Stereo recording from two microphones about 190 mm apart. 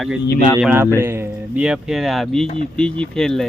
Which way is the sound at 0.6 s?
10° right (ahead or behind).